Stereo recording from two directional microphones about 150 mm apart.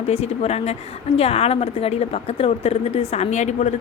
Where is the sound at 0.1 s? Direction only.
45° left (ahead or behind).